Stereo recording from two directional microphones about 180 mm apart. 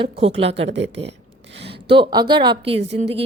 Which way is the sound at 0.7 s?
80° right.